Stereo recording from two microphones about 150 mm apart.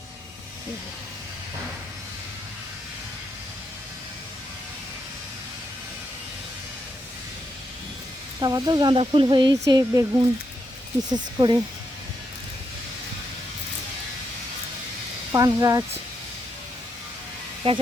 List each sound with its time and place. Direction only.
8.4 s speech: 25° right (ahead or behind)
15.3 s speech: 20° right (ahead or behind)